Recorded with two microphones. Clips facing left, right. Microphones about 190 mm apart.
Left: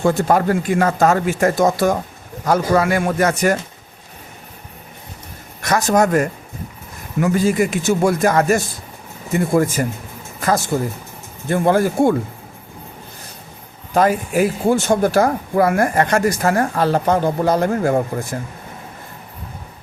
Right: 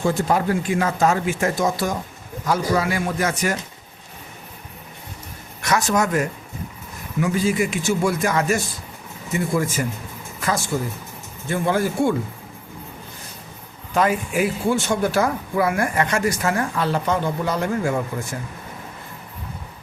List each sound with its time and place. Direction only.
0.2 s speech: 50° left (ahead or behind)
5.6 s speech: 40° left (ahead or behind)
13.9 s speech: 40° left (ahead or behind)